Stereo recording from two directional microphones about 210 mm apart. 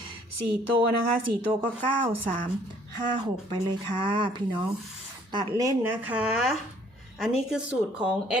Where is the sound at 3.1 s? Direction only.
20° right (ahead or behind).